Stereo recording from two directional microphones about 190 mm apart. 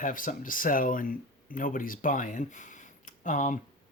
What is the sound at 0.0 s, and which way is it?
Speech, 45° left (ahead or behind).